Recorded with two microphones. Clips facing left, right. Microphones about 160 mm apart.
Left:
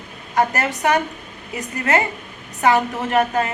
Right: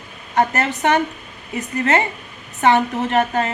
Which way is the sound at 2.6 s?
30° right (ahead or behind).